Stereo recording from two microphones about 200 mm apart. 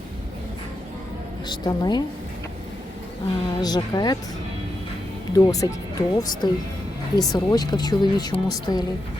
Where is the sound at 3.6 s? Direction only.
20° left (ahead or behind).